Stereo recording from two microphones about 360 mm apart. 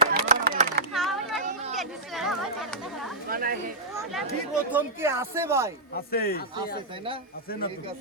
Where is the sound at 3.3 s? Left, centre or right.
Right.